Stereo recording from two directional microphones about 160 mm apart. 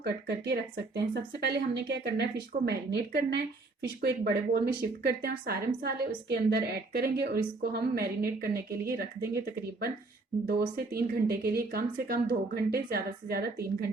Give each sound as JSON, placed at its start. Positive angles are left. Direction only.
{"t": 0.0, "sound": "speech", "side_deg": -90}
{"t": 10.4, "sound": "speech", "side_deg": -75}